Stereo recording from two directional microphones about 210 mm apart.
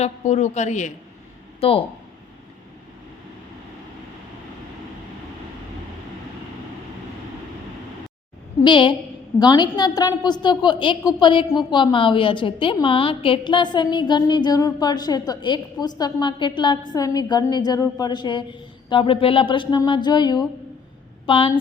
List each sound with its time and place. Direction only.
0.0 s a woman's voice: 35° left (ahead or behind)
8.6 s a woman's voice: 20° left (ahead or behind)